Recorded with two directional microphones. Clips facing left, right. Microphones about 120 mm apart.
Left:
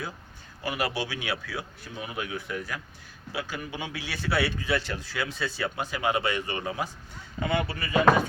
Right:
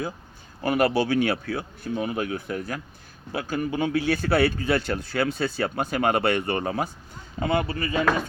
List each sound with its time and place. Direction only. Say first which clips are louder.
0.6 s speech: right 8 dB; 50° right (ahead or behind)
7.3 s speech: right 4 dB; 40° right (ahead or behind)